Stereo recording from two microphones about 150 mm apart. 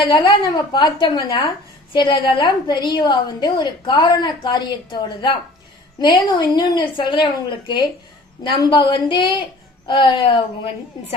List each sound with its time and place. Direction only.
0.0 s a woman's voice: 30° left (ahead or behind)